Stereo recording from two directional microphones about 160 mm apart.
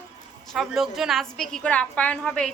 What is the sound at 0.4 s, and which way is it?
A woman's voice, centre (ahead or behind).